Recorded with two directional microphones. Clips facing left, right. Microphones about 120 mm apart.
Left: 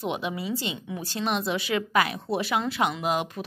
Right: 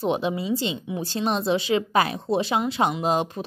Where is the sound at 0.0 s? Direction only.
30° right (ahead or behind).